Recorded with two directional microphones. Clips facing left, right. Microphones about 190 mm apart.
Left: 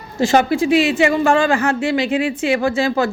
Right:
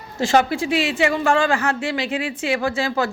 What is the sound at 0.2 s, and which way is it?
Speech, 15° left (ahead or behind).